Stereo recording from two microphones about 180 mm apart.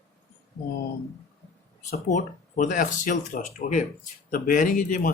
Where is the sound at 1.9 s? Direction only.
40° left (ahead or behind).